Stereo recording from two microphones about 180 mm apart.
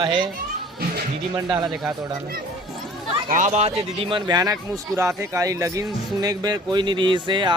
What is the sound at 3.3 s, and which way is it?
Speech, 45° right (ahead or behind).